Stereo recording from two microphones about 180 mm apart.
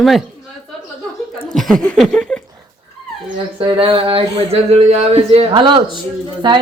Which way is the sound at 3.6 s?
30° right (ahead or behind).